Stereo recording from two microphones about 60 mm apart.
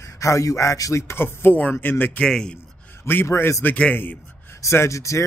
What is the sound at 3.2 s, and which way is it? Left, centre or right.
Speech, left.